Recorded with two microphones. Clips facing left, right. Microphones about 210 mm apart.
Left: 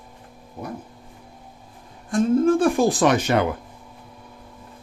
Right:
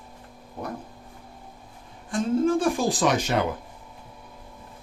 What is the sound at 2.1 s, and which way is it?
Speech, 55° left (ahead or behind).